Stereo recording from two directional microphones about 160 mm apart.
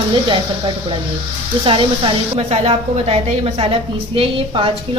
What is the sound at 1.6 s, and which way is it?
A woman's voice, 30° right (ahead or behind).